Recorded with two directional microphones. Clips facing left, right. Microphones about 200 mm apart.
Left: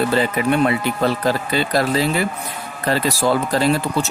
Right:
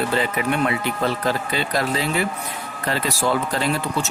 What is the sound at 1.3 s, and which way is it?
Speech, 35° left (ahead or behind).